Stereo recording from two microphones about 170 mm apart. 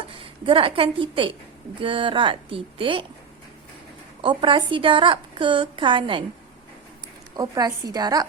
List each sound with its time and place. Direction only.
0.1 s a woman's voice: 30° right (ahead or behind)
4.2 s a woman's voice: 30° right (ahead or behind)
7.3 s a woman's voice: 20° right (ahead or behind)